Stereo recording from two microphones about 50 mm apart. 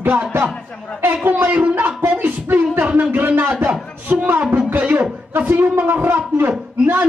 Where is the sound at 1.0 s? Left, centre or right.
Right.